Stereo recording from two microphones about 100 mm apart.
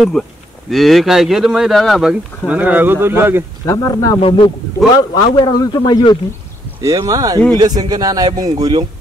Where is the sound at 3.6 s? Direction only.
35° left (ahead or behind).